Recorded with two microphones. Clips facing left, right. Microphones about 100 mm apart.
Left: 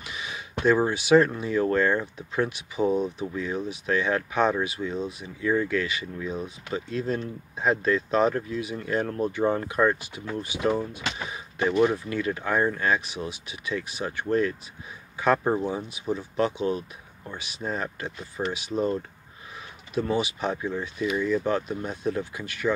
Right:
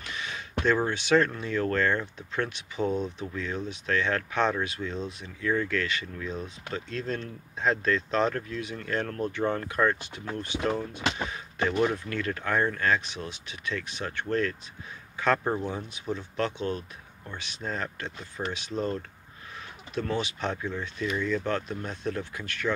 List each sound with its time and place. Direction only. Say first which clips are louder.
0.0 s speech: even; 10° left (ahead or behind)